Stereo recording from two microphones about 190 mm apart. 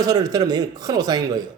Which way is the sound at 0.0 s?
20° right (ahead or behind).